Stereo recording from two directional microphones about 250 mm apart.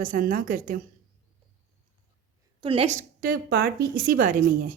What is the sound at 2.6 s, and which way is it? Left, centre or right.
A woman's voice, right.